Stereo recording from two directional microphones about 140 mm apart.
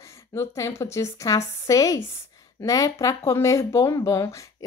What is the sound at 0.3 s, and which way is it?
A woman's voice, 20° left (ahead or behind).